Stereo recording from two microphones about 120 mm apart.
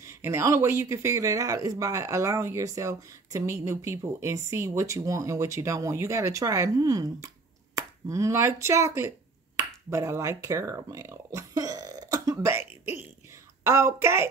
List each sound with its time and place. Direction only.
0.0 s speech: 20° right (ahead or behind)
9.6 s finger snapping: 25° right (ahead or behind)
13.7 s speech: 25° right (ahead or behind)